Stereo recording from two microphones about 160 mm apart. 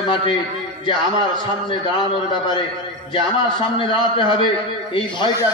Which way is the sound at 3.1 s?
30° left (ahead or behind).